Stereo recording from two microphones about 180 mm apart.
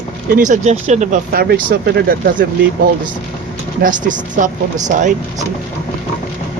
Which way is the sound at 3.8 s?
45° right (ahead or behind).